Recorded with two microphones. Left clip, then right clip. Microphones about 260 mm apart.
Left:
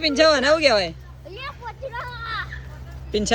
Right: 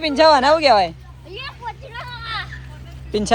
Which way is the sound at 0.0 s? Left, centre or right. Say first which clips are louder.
Right 4 dB; centre.